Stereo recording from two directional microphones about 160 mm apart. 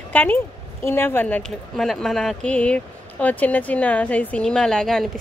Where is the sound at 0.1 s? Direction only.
10° left (ahead or behind).